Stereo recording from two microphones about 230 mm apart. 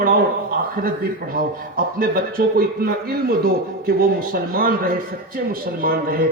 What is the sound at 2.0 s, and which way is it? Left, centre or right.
Speech, right.